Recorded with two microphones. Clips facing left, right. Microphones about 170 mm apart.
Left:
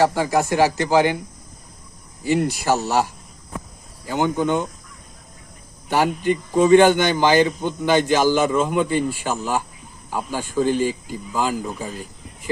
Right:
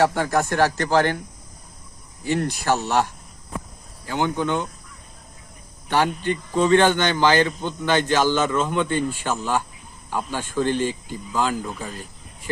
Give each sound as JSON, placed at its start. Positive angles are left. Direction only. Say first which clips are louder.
{"t": 0.0, "sound": "a man's voice", "louder": "left 2 dB", "side_deg": 5}
{"t": 2.2, "sound": "a man's voice", "louder": "left 3 dB", "side_deg": 10}
{"t": 5.9, "sound": "a man's voice", "louder": "left 2 dB", "side_deg": 10}